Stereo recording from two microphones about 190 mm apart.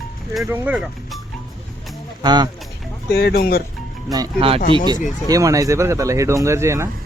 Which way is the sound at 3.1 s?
55° left (ahead or behind).